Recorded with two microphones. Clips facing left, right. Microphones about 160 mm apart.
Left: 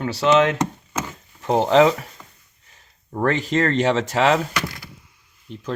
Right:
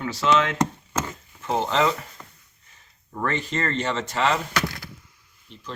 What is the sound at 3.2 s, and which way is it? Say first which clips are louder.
Speech: left 7 dB; 90° left.